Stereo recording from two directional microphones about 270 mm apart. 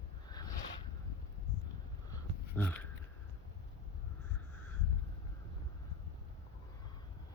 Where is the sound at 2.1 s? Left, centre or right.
Centre.